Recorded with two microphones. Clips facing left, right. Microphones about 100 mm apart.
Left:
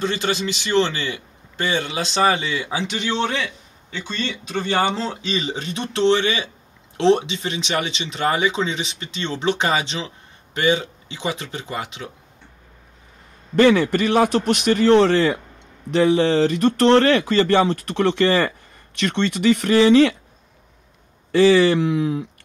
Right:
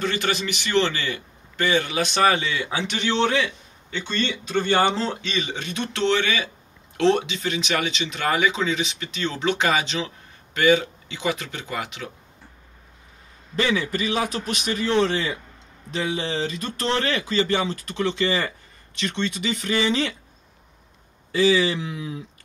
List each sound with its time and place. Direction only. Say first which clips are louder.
0.0 s speech: left 2 dB; 25° left (ahead or behind)
3.9 s speech: right 1 dB; 5° left (ahead or behind); by 12.1 s 25° left (ahead or behind)
13.6 s speech: left 9 dB; 65° left (ahead or behind)
21.3 s speech: left 6 dB; 65° left (ahead or behind)